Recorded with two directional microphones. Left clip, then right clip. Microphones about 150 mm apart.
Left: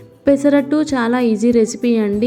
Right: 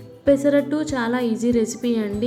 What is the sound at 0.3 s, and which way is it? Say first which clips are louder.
A woman's voice: left 4 dB; 35° left (ahead or behind).